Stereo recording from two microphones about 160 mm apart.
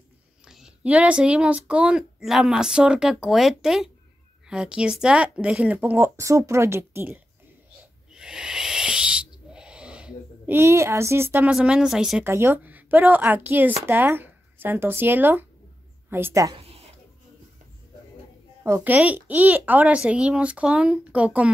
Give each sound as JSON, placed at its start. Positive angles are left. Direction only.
{"t": 0.5, "sound": "speech", "side_deg": -5}
{"t": 8.1, "sound": "owl", "side_deg": -5}
{"t": 11.5, "sound": "speech", "side_deg": -5}
{"t": 12.3, "sound": "speech", "side_deg": -15}
{"t": 16.6, "sound": "a sound", "side_deg": -40}
{"t": 18.6, "sound": "speech", "side_deg": -10}